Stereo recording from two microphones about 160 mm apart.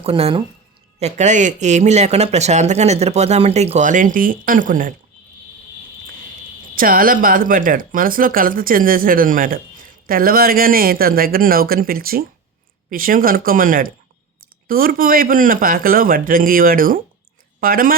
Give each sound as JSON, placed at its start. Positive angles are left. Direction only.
{"t": 0.0, "sound": "speech", "side_deg": -35}
{"t": 6.7, "sound": "speech", "side_deg": -60}